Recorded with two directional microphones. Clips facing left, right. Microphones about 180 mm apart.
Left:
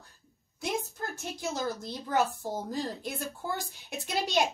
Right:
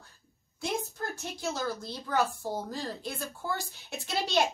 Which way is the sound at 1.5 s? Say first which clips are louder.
Even; 20° left (ahead or behind).